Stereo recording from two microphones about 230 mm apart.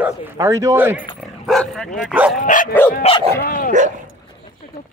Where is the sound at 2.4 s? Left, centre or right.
Left.